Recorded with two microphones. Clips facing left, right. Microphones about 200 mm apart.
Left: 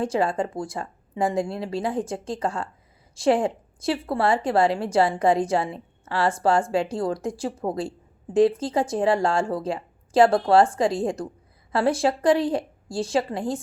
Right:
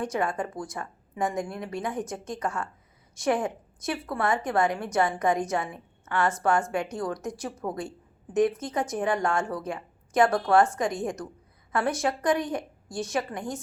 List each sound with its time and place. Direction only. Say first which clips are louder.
0.0 s speech: left 5 dB; 30° left (ahead or behind)